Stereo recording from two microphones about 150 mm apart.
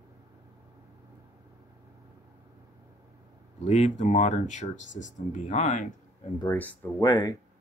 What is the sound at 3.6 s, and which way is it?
Speech, 50° left (ahead or behind).